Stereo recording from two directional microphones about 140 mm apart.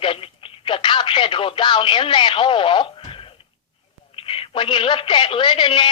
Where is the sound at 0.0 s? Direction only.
40° left (ahead or behind).